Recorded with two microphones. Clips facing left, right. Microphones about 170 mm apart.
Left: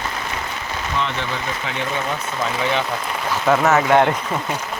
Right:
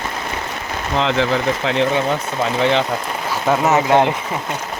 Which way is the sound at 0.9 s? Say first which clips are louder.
Right 8 dB; 90° right.